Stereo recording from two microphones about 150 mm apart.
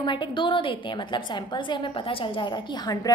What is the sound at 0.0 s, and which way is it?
A woman's voice, 30° left (ahead or behind).